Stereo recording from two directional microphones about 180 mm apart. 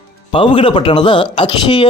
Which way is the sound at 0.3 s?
30° left (ahead or behind).